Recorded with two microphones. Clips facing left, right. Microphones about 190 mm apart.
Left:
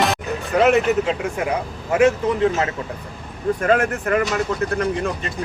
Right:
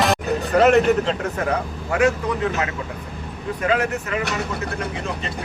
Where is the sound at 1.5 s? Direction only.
20° left (ahead or behind).